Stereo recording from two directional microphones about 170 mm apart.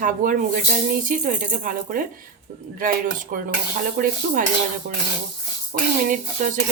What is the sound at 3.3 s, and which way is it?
Speech, 60° right (ahead or behind).